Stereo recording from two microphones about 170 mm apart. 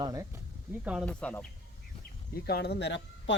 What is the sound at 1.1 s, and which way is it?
Speech, 10° left (ahead or behind).